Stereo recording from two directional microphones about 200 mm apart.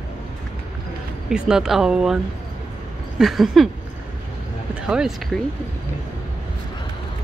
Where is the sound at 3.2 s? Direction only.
Centre (ahead or behind).